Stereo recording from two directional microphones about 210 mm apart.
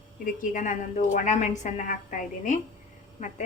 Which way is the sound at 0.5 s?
35° left (ahead or behind).